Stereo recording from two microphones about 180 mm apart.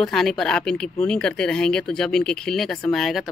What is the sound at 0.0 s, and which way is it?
Speech, centre (ahead or behind).